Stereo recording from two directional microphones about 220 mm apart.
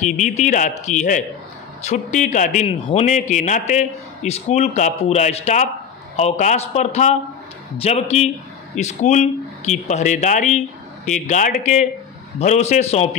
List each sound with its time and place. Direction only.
0.0 s a man's voice: 35° left (ahead or behind)